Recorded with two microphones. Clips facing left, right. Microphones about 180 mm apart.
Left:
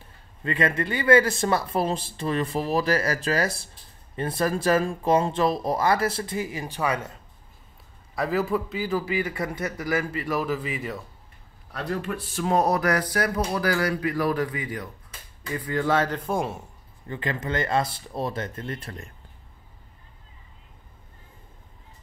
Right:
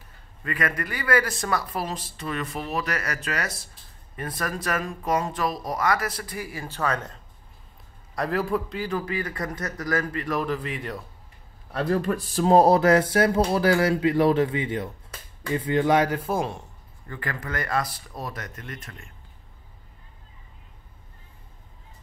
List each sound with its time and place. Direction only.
0.4 s speech: 25° left (ahead or behind); by 7.2 s 10° left (ahead or behind)
8.2 s a man's voice: centre (ahead or behind)
11.7 s speech: 35° right (ahead or behind); by 16.6 s centre (ahead or behind)
17.1 s speech: 20° left (ahead or behind)